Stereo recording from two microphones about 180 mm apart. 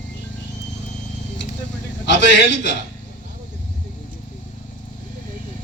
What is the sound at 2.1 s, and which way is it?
Speech, 80° left.